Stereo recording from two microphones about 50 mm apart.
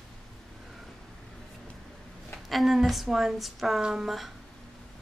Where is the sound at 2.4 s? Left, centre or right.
Centre.